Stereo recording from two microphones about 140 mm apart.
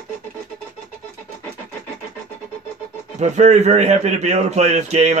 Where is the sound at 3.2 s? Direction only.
55° right (ahead or behind).